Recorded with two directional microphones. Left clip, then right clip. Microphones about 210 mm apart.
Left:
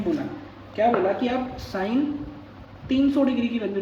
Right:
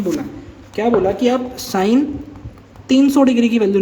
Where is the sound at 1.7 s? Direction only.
55° right (ahead or behind).